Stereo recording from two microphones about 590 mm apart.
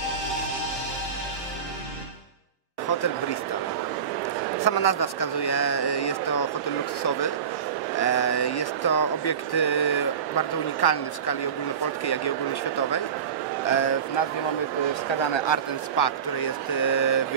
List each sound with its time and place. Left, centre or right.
2.9 s speech: left
4.6 s speech: left
13.7 s speech: left
15.3 s speech: left